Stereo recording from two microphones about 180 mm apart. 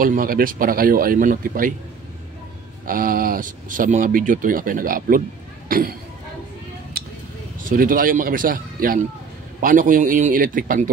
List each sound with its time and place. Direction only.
0.0 s speech: 50° right (ahead or behind)
2.9 s speech: 50° right (ahead or behind)
7.6 s speech: 50° right (ahead or behind)